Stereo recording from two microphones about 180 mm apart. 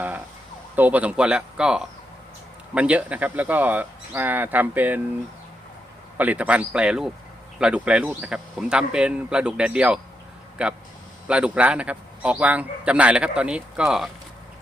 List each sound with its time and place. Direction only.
0.8 s a man's voice: 10° right (ahead or behind)
6.1 s a man's voice: 10° right (ahead or behind)